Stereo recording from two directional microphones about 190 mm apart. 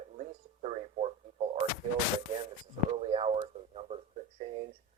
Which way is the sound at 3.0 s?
30° right (ahead or behind).